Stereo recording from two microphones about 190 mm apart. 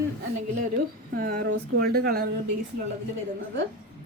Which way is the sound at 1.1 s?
50° right (ahead or behind).